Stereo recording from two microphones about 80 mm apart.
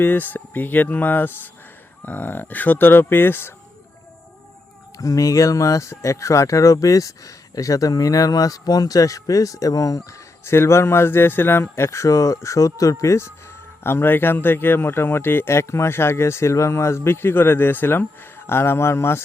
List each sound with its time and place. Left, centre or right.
0.0 s speech: left
4.9 s speech: left
10.4 s speech: left